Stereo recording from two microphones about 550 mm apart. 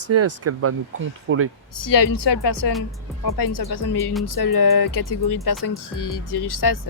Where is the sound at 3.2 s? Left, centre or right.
Left.